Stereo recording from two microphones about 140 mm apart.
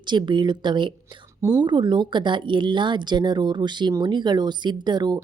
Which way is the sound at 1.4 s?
20° right (ahead or behind).